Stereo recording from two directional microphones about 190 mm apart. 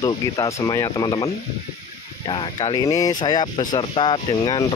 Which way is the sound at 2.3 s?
25° left (ahead or behind).